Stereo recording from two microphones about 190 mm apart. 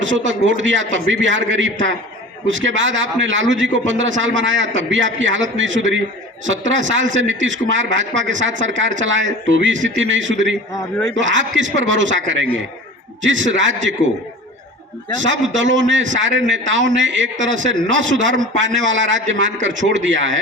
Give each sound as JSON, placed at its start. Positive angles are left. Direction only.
{"t": 0.0, "sound": "speech", "side_deg": -80}
{"t": 15.2, "sound": "speech", "side_deg": -80}